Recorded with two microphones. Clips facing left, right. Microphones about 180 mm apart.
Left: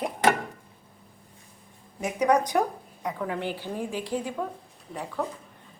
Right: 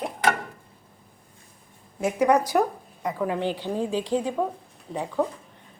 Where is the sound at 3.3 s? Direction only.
20° right (ahead or behind).